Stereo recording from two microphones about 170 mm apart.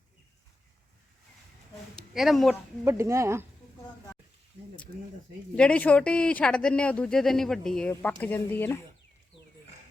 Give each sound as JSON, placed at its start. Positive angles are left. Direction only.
{"t": 2.0, "sound": "speech", "side_deg": 0}
{"t": 2.8, "sound": "speech", "side_deg": -15}
{"t": 5.5, "sound": "speech", "side_deg": 5}